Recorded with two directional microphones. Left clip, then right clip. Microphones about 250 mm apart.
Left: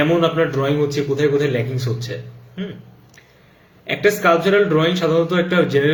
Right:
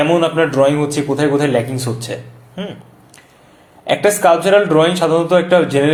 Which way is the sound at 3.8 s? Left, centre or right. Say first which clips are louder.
Right 4 dB; centre.